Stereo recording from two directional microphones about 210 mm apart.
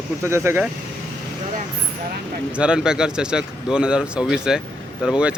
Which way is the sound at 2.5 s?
5° right (ahead or behind).